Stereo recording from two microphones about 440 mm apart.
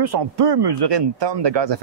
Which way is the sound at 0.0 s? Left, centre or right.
Right.